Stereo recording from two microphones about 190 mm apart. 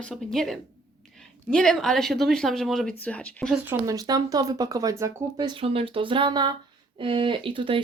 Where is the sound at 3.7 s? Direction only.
20° right (ahead or behind).